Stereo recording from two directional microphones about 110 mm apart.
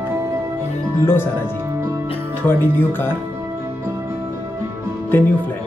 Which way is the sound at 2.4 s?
20° left (ahead or behind).